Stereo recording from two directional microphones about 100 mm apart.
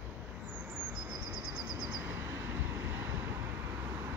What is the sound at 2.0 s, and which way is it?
Vehicle, 25° right (ahead or behind).